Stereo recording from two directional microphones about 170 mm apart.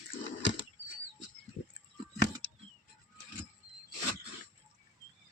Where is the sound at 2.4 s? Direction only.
90° left.